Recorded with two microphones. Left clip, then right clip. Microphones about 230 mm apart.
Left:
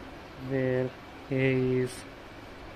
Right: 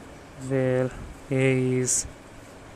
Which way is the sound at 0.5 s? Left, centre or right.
Centre.